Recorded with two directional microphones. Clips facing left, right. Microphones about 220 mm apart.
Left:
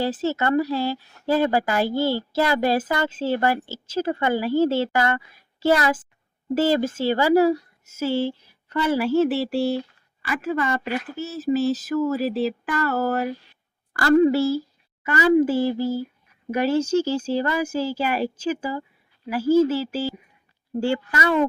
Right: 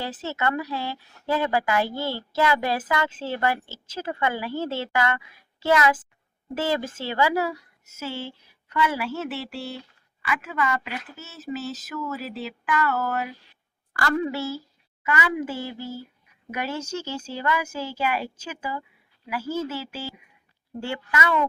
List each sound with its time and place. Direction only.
0.0 s speech: 30° left (ahead or behind)
20.8 s speech: 35° left (ahead or behind)